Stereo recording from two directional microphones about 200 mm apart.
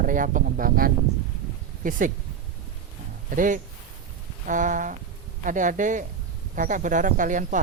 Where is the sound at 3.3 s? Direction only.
40° right (ahead or behind).